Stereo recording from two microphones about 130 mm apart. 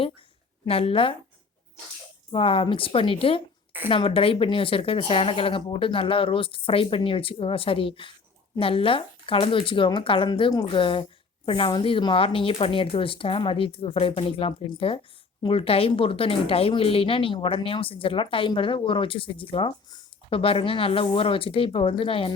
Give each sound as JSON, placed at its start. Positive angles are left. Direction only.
{"t": 0.7, "sound": "a woman's voice", "side_deg": 45}
{"t": 2.3, "sound": "a woman's voice", "side_deg": 45}